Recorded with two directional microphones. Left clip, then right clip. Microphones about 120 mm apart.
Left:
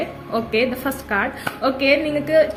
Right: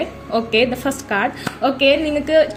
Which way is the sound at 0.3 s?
35° right (ahead or behind).